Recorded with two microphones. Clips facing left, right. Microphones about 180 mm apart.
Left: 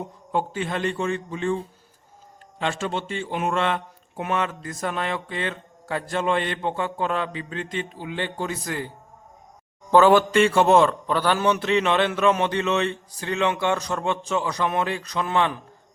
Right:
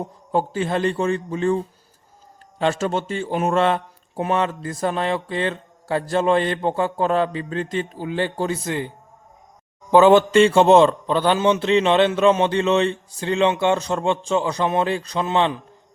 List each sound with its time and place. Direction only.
0.3 s speech: 35° right (ahead or behind)
2.6 s speech: 40° right (ahead or behind); by 8.9 s 25° right (ahead or behind)
9.9 s a man's voice: 20° right (ahead or behind)